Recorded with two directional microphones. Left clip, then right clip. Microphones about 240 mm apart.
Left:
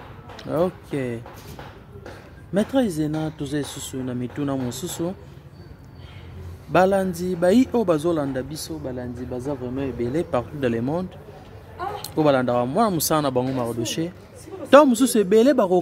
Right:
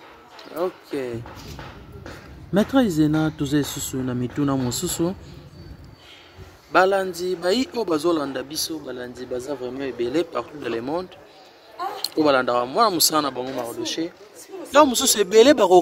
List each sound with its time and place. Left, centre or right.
0.9 s a man's voice: centre
2.5 s speech: centre
6.7 s a man's voice: centre
10.6 s a man's voice: centre
14.7 s speech: centre